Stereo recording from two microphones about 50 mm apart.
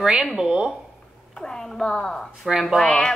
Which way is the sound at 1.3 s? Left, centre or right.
Centre.